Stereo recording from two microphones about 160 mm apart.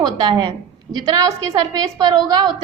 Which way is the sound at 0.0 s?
25° right (ahead or behind).